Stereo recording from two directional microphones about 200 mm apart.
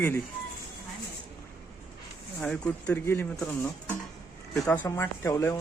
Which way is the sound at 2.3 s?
5° left (ahead or behind).